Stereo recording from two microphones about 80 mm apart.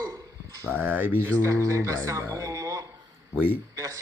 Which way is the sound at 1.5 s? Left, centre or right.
Right.